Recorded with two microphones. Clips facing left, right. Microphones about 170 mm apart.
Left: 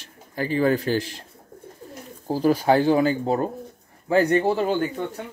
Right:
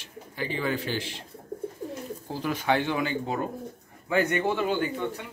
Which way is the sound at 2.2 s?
40° left (ahead or behind).